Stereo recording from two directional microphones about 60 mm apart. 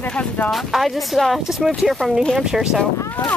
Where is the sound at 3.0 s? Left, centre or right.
Left.